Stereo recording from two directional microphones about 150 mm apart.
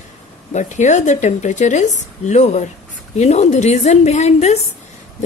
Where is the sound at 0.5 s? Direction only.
55° left (ahead or behind).